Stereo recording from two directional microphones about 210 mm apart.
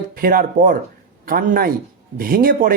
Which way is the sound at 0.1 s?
45° right (ahead or behind).